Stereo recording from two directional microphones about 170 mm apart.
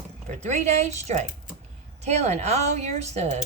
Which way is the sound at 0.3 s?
45° right (ahead or behind).